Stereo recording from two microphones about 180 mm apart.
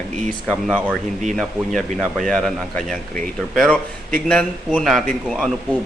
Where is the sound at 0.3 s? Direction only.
5° left (ahead or behind).